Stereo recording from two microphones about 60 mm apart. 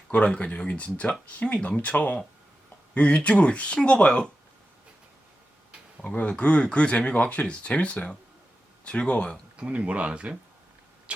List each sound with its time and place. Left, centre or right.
0.1 s speech: left
6.0 s speech: left
9.6 s speech: right